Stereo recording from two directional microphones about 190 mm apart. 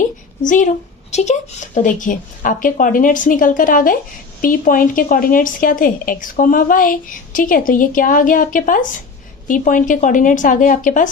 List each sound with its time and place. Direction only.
0.4 s a woman's voice: 45° left (ahead or behind)